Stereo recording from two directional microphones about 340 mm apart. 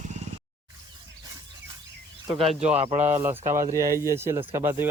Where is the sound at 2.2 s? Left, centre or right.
Centre.